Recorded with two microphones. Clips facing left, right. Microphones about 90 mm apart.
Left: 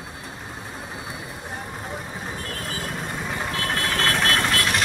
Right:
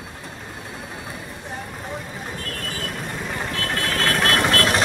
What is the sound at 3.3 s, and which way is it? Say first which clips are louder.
Vehicle: even; 5° left (ahead or behind).